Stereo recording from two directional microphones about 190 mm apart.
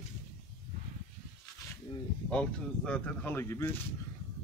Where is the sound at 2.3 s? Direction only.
5° left (ahead or behind).